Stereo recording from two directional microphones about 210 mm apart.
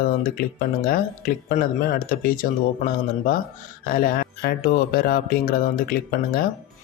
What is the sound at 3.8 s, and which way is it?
Speech, 45° left (ahead or behind).